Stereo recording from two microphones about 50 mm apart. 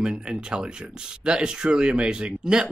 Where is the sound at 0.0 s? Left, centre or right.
Centre.